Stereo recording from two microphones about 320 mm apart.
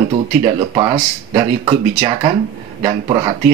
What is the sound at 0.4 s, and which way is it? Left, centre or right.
Speech, centre.